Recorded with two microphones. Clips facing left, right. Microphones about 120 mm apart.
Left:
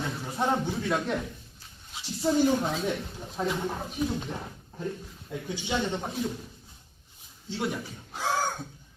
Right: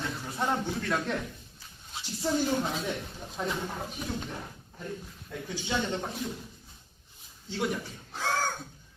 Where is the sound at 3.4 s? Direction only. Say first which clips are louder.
Left 3 dB; 15° left (ahead or behind).